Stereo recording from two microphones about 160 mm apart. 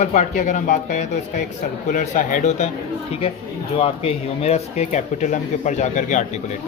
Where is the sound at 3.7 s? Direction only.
40° left (ahead or behind).